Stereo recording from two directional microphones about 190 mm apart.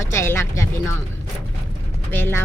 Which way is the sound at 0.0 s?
15° left (ahead or behind).